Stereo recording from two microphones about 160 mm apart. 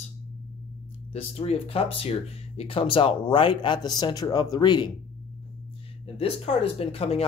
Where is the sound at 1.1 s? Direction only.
40° left (ahead or behind).